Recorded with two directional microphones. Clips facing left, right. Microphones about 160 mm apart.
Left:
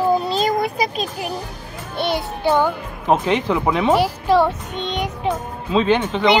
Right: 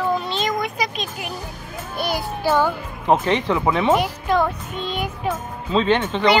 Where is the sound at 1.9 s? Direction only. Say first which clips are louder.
Left 3 dB; 25° left (ahead or behind).